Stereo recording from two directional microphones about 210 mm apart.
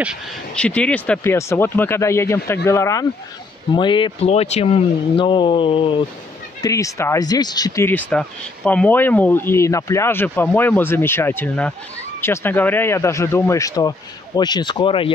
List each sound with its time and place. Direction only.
0.0 s speech: centre (ahead or behind); by 15.1 s 25° left (ahead or behind)